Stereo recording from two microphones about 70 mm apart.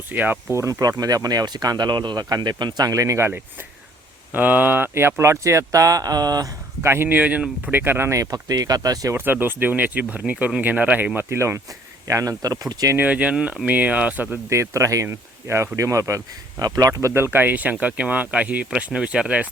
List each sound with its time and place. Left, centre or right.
0.1 s speech: right
0.5 s speech: right
2.9 s speech: right
3.2 s speech: right
6.8 s speech: right
8.2 s speech: right
9.1 s speech: right
11.3 s speech: right
13.0 s speech: centre
14.5 s speech: right; by 19.5 s centre